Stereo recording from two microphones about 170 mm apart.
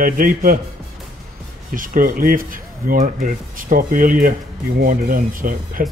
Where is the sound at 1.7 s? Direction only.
55° right (ahead or behind).